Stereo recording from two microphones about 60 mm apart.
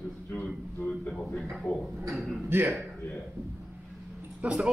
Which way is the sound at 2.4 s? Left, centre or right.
Right.